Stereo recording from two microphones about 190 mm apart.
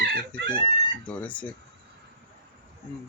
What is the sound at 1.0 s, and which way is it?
Speech, 10° left (ahead or behind).